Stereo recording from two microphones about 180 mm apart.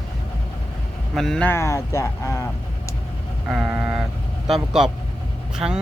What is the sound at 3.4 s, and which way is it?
Speech, 5° right (ahead or behind).